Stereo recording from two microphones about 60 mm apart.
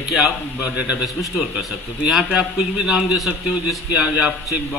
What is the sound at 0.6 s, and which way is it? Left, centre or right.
Speech, centre.